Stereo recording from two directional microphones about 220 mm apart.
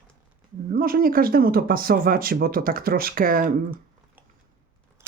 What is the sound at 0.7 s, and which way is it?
Speech, 40° right (ahead or behind).